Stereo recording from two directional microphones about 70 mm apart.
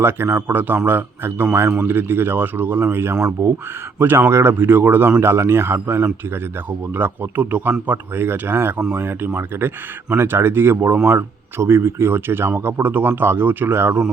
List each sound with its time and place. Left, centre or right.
0.0 s a man's voice: right